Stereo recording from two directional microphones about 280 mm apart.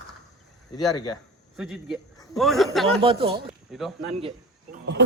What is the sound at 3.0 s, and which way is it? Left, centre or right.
Speech, centre.